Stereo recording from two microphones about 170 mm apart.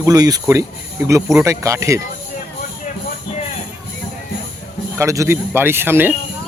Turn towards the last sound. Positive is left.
turn(degrees=-15)  # may be behind; listen again after turning